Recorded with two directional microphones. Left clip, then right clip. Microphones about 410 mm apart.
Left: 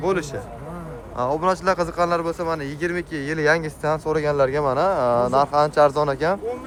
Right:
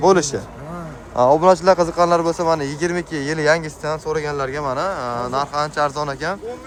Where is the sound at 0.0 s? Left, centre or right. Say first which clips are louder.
Right 8 dB; centre.